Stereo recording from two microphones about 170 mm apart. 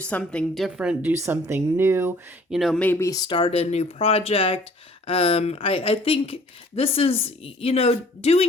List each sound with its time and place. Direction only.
0.0 s a woman's voice: 5° left (ahead or behind); by 2.1 s 15° right (ahead or behind)
2.5 s speech: centre (ahead or behind)
2.8 s speech: 15° left (ahead or behind); by 8.4 s 35° left (ahead or behind)